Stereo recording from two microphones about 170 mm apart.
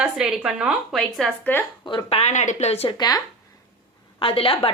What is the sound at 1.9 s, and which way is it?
A woman's voice, 30° left (ahead or behind).